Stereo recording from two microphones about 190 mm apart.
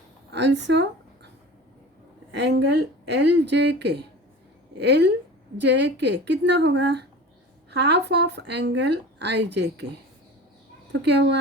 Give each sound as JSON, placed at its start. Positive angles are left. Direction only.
{"t": 0.3, "sound": "speech", "side_deg": -65}
{"t": 2.3, "sound": "a woman's voice", "side_deg": -60}
{"t": 11.0, "sound": "a woman's voice", "side_deg": -65}